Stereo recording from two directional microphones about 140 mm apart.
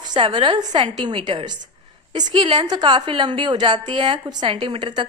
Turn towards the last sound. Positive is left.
turn(degrees=-35)  # may be behind; listen again after turning